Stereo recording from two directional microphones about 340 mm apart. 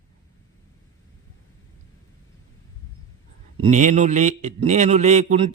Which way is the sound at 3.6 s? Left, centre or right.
Right.